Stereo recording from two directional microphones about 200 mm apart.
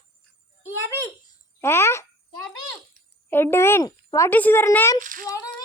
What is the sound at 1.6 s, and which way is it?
Speech, 10° left (ahead or behind).